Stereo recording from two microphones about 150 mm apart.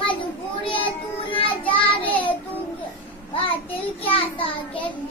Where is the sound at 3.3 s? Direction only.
40° left (ahead or behind).